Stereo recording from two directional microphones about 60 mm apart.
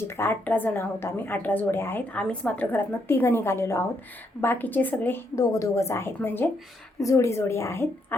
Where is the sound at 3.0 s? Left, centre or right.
Left.